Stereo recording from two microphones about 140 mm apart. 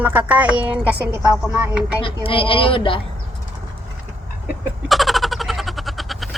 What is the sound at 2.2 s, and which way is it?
Speech, 40° left (ahead or behind).